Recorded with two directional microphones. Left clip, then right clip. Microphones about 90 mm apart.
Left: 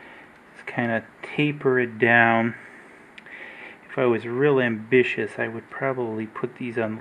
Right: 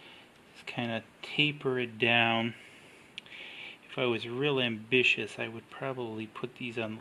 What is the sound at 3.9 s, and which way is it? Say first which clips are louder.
Speech: left 9 dB; 40° right (ahead or behind).